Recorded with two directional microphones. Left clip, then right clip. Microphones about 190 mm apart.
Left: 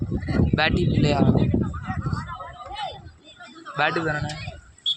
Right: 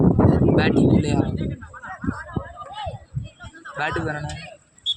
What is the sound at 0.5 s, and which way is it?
Speech, 5° left (ahead or behind).